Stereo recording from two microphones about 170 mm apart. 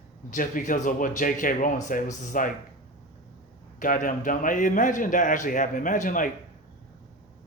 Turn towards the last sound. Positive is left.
turn(degrees=50)  # may be behind; listen again after turning